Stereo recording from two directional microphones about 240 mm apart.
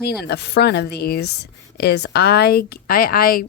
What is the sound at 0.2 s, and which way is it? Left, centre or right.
A woman's voice, left.